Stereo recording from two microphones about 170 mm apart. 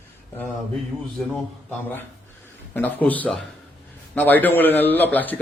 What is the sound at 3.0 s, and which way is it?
Speech, 10° left (ahead or behind).